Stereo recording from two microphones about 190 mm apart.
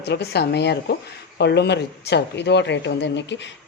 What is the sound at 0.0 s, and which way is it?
Speech, 60° left (ahead or behind).